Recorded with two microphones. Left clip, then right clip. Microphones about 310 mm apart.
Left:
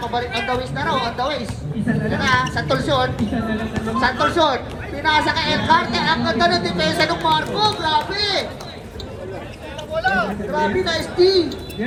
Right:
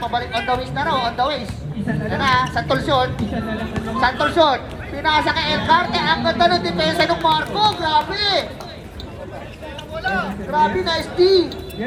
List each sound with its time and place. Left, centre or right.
0.0 s speech: right
9.9 s speech: centre
10.5 s speech: centre